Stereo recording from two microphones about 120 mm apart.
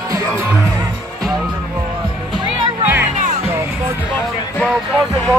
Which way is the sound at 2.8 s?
15° right (ahead or behind).